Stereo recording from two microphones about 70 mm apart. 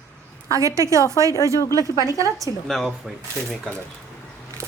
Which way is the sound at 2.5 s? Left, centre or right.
Left.